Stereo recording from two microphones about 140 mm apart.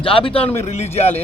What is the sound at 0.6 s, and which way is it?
Speech, 50° left (ahead or behind).